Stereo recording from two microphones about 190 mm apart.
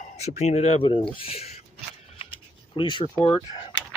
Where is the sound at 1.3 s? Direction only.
35° left (ahead or behind).